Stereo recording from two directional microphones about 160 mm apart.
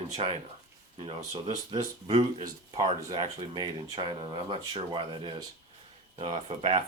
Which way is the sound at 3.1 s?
30° right (ahead or behind).